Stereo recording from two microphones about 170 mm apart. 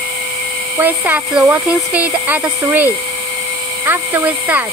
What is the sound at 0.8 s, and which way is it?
Speech, 10° right (ahead or behind).